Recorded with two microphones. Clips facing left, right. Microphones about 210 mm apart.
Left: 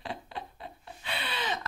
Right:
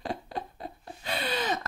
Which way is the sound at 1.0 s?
40° right (ahead or behind).